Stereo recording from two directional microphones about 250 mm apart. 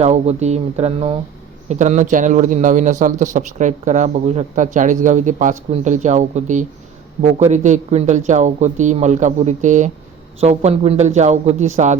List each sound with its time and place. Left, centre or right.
0.0 s speech: right